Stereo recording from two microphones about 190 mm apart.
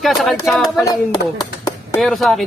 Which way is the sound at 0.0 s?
Centre (ahead or behind).